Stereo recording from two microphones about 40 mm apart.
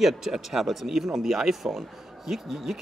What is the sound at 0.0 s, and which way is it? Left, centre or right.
A man's voice, centre.